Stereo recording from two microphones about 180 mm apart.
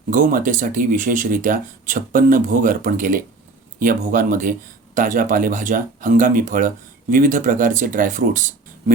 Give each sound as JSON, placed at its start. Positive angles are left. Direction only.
{"t": 0.1, "sound": "speech", "side_deg": -50}